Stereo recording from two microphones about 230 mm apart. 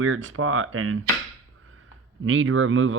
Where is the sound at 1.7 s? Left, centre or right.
Right.